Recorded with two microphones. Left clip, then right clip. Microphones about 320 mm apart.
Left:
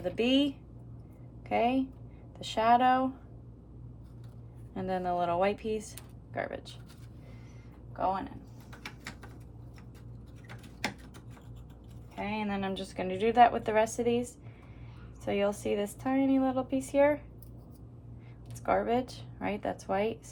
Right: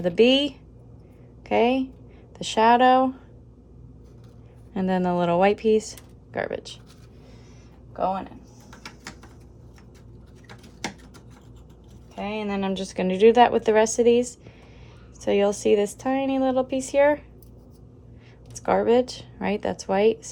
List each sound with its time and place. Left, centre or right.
0.0 s a woman's voice: right
4.7 s a woman's voice: right
12.1 s a woman's voice: right
18.6 s a woman's voice: right